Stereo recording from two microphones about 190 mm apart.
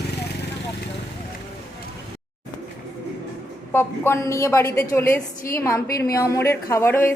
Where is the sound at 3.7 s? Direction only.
15° left (ahead or behind).